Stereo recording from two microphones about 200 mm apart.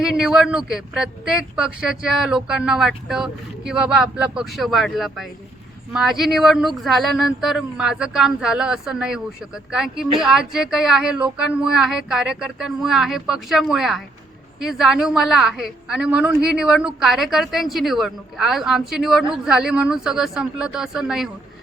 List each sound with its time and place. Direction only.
0.0 s a woman's voice: 5° right (ahead or behind)